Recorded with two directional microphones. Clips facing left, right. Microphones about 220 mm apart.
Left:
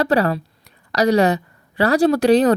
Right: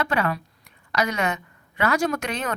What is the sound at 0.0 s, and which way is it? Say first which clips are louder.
A woman's voice: left 7 dB; 35° left (ahead or behind).